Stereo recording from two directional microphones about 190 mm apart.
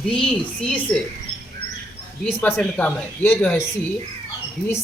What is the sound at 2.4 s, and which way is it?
Speech, 10° left (ahead or behind).